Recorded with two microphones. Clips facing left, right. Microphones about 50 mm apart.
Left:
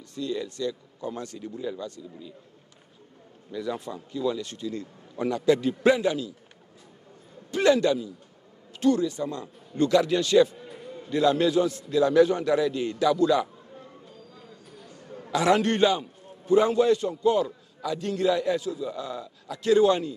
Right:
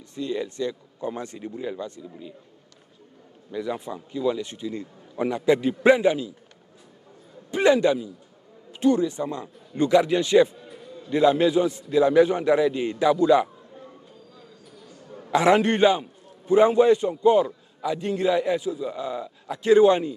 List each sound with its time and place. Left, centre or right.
0.1 s a man's voice: right
3.5 s a man's voice: centre
7.5 s a man's voice: centre
14.9 s chatter: left
15.3 s a man's voice: right